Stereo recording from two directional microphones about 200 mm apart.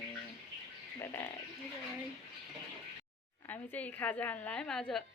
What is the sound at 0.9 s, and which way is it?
Speech, 10° left (ahead or behind).